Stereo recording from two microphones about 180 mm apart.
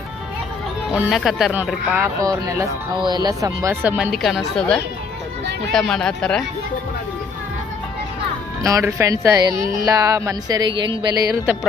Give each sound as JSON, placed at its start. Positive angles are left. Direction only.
{"t": 0.9, "sound": "speech", "side_deg": -5}
{"t": 8.6, "sound": "speech", "side_deg": -15}
{"t": 9.8, "sound": "a sound", "side_deg": -20}